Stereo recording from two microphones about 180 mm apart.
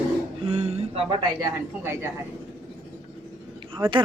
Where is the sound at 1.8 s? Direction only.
10° right (ahead or behind).